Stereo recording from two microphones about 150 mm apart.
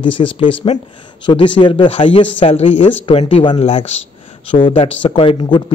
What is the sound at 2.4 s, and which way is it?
Speech, 50° left (ahead or behind).